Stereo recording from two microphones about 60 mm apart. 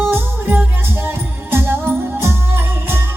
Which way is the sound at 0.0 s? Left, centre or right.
Right.